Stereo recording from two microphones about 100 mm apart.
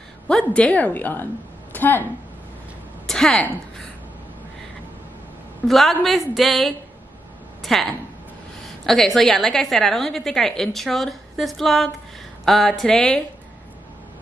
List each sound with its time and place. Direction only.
0.3 s a woman's voice: 10° left (ahead or behind)
3.1 s a woman's voice: 5° left (ahead or behind)
5.7 s a woman's voice: centre (ahead or behind)